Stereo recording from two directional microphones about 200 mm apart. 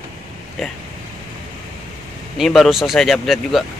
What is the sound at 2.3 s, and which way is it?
Speech, centre (ahead or behind).